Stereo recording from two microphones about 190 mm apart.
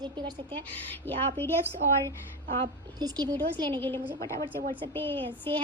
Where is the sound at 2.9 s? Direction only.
20° right (ahead or behind).